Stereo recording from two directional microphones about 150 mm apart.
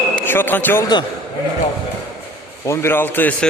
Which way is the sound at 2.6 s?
15° left (ahead or behind).